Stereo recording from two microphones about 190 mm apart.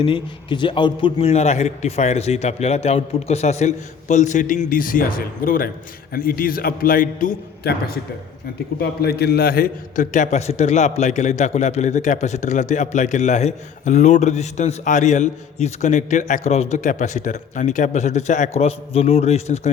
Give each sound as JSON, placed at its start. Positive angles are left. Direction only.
{"t": 0.0, "sound": "a man's voice", "side_deg": 25}